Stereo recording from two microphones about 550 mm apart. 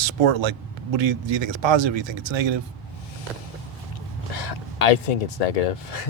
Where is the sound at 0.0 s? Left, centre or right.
Right.